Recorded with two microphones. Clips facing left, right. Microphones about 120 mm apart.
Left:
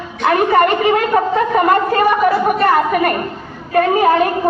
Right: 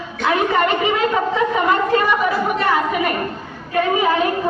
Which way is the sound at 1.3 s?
50° left (ahead or behind).